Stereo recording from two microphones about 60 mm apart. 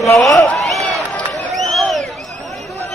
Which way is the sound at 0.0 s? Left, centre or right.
Left.